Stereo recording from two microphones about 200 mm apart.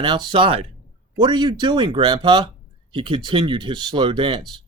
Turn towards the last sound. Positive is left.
turn(degrees=-25)  # may be behind; listen again after turning